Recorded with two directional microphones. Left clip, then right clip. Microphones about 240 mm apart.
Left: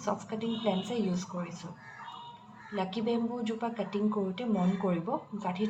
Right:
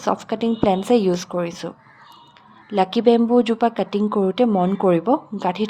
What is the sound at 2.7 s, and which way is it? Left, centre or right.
A woman's voice, right.